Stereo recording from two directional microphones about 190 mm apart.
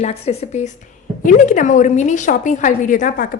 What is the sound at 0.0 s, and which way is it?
A woman's voice, 35° left (ahead or behind).